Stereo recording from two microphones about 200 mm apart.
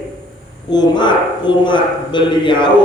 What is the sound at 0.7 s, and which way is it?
A man's voice, 20° left (ahead or behind).